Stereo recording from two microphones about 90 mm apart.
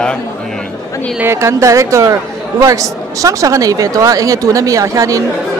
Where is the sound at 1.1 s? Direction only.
30° right (ahead or behind).